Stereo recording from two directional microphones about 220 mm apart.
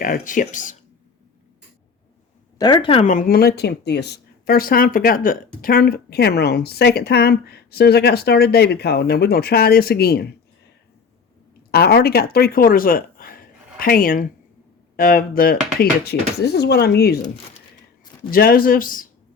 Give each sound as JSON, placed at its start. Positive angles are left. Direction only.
{"t": 0.0, "sound": "speech", "side_deg": 40}
{"t": 2.6, "sound": "speech", "side_deg": 20}
{"t": 11.7, "sound": "speech", "side_deg": 45}
{"t": 18.3, "sound": "speech", "side_deg": 40}